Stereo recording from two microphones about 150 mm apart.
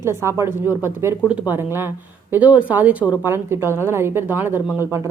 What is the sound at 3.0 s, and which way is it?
Speech, 30° left (ahead or behind).